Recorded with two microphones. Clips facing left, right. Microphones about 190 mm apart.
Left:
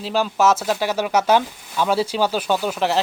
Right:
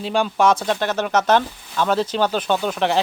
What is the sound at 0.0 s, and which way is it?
A man's voice, 5° left (ahead or behind).